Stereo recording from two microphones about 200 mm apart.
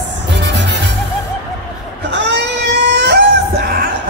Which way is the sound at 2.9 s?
55° right (ahead or behind).